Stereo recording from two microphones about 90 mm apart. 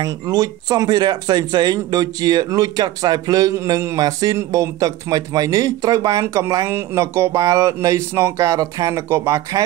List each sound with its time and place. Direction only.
0.0 s speech: 45° right (ahead or behind)